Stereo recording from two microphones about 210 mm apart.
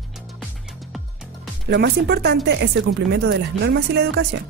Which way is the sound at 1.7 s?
50° right (ahead or behind).